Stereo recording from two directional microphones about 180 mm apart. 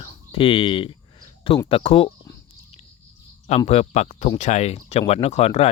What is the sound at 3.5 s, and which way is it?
Speech, 35° left (ahead or behind).